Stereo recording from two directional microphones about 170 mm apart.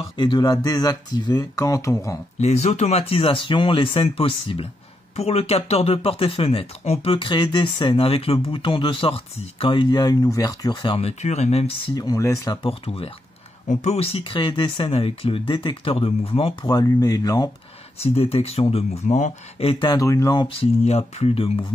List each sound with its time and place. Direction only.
0.2 s speech: 25° left (ahead or behind)
2.3 s speech: 40° left (ahead or behind)
11.9 s speech: 20° left (ahead or behind)
12.6 s speech: 35° left (ahead or behind)
18.0 s speech: 35° left (ahead or behind); by 20.4 s 20° left (ahead or behind)
20.6 s speech: 40° left (ahead or behind)